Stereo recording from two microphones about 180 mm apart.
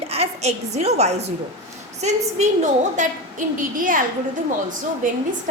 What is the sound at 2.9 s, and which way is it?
A woman's voice, 45° right (ahead or behind).